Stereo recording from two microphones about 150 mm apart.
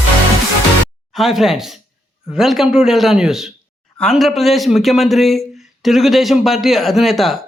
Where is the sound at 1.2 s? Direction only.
Centre (ahead or behind).